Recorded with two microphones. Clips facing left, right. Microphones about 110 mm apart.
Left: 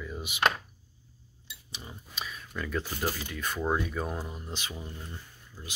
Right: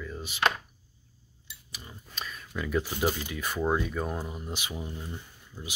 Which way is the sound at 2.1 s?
5° left (ahead or behind).